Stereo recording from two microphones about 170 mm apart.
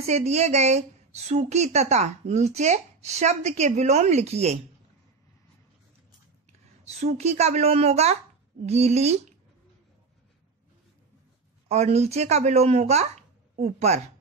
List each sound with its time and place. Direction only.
0.1 s a woman's voice: 40° right (ahead or behind)
6.9 s a woman's voice: 40° right (ahead or behind)
11.7 s a woman's voice: 40° right (ahead or behind)